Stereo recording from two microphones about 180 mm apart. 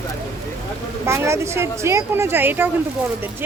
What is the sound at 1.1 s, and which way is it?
Speech, 15° right (ahead or behind).